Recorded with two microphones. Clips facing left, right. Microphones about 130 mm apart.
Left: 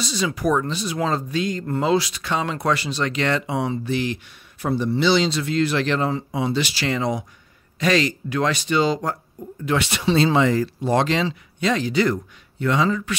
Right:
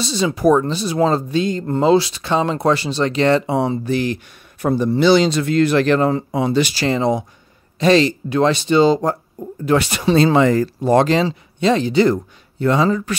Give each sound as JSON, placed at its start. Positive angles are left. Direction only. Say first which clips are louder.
{"t": 0.0, "sound": "speech", "louder": "right 6 dB", "side_deg": -30}
{"t": 9.7, "sound": "speech", "louder": "right 5 dB", "side_deg": -40}